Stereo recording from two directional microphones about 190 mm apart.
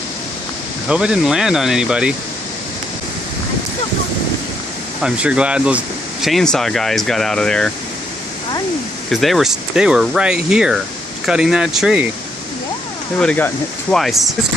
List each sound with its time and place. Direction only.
0.9 s speech: 5° right (ahead or behind)
5.0 s speech: 5° right (ahead or behind)
9.0 s speech: centre (ahead or behind)
13.1 s speech: 5° left (ahead or behind)